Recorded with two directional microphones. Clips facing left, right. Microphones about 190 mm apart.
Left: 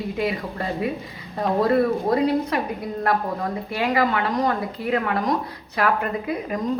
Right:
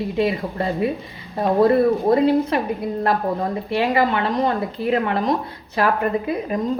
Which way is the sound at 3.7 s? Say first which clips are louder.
Right 3 dB; 25° right (ahead or behind).